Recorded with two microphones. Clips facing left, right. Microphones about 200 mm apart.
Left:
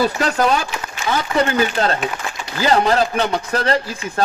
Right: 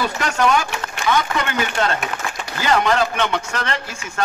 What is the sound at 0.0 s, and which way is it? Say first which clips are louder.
A man's voice: left 3 dB; 35° left (ahead or behind).